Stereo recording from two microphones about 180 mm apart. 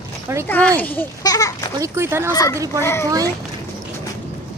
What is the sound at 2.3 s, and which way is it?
Speech, 20° left (ahead or behind).